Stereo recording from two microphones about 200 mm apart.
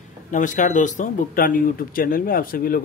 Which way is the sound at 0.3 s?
40° left (ahead or behind).